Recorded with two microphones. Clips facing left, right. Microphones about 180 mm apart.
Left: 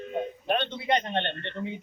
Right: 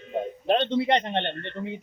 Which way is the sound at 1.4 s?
Centre (ahead or behind).